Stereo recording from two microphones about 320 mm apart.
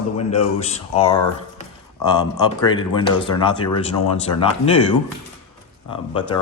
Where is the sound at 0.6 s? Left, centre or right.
Centre.